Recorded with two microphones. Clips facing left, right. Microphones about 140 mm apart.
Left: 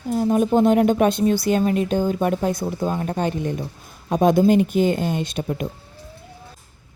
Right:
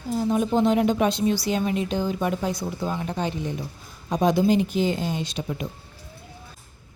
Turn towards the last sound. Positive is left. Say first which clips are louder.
# left 4 dB
turn(degrees=50)  # may be behind; listen again after turning